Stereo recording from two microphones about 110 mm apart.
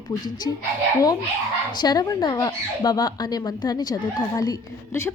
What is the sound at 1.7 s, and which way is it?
Speech, 35° left (ahead or behind).